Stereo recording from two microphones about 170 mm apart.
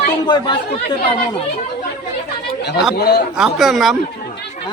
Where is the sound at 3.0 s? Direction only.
75° left (ahead or behind).